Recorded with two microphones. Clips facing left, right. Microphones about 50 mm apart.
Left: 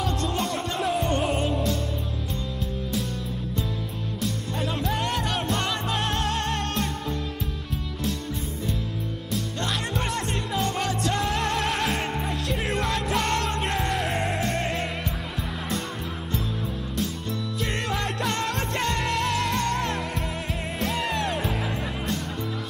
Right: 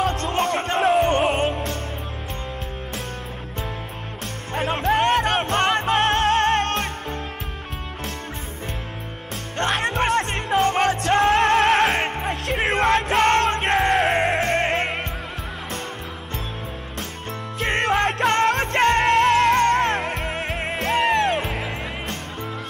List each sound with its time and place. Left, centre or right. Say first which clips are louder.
0.0 s music: right 5 dB; right
4.2 s music: right 3 dB; right
9.3 s music: right 6 dB; right
17.6 s music: right 10 dB; right